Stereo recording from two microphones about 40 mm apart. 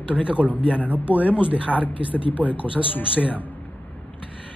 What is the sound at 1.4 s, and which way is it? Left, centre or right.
Speech, right.